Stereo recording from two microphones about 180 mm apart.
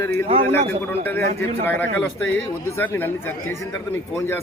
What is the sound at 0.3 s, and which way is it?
Speech, 30° right (ahead or behind).